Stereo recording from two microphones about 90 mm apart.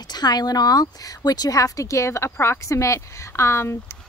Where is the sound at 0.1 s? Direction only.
50° left (ahead or behind).